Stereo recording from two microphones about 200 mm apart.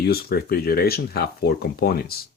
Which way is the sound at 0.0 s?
50° left (ahead or behind).